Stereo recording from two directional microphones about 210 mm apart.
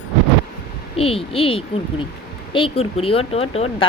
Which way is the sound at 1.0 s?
25° left (ahead or behind).